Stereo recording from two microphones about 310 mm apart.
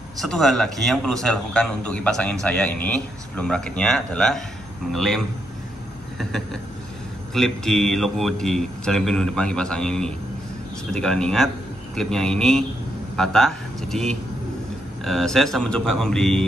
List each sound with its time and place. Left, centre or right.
0.2 s a man's voice: centre